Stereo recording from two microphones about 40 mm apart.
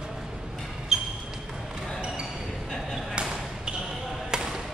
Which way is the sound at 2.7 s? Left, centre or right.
Centre.